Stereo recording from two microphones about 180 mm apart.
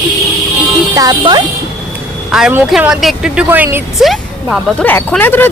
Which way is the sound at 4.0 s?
Centre (ahead or behind).